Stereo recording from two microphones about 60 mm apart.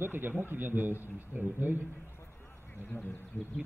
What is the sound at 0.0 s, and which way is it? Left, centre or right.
A man's voice, right.